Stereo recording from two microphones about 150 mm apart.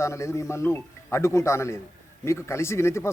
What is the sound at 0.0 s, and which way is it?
Speech, 20° left (ahead or behind).